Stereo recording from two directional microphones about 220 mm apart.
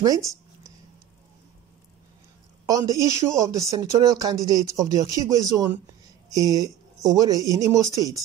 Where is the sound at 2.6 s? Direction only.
15° right (ahead or behind).